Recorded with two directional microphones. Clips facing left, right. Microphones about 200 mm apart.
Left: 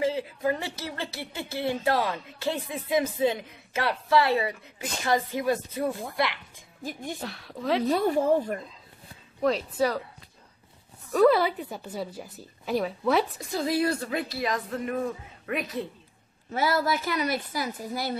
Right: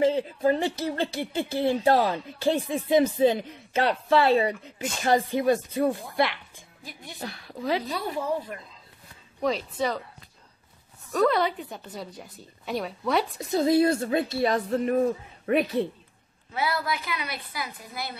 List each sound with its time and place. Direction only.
0.0 s speech: 30° right (ahead or behind)
6.8 s a woman's voice: 45° left (ahead or behind)
7.2 s a woman's voice: centre (ahead or behind)
7.9 s a woman's voice: 45° left (ahead or behind)
9.4 s a woman's voice: centre (ahead or behind)
11.1 s a woman's voice: 5° left (ahead or behind)
13.4 s a woman's voice: 25° right (ahead or behind)
16.4 s a woman's voice: 45° left (ahead or behind)